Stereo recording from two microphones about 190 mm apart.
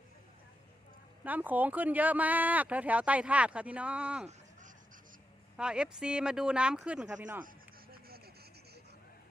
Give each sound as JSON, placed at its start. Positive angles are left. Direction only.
{"t": 1.2, "sound": "speech", "side_deg": -10}
{"t": 5.5, "sound": "speech", "side_deg": -5}
{"t": 7.4, "sound": "a sound", "side_deg": -55}